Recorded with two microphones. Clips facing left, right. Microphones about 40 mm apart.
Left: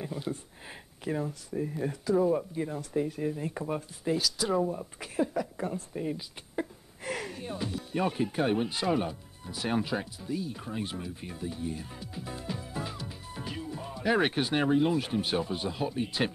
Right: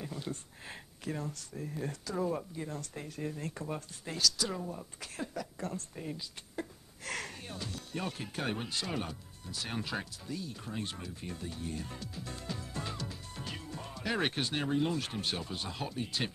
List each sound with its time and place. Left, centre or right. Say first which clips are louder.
0.0 s speech: left 5 dB; centre
7.1 s a sound: left 5 dB; centre
7.5 s speech: left 9 dB; centre
12.1 s music: left 4 dB; centre
16.0 s speech: left 5 dB; centre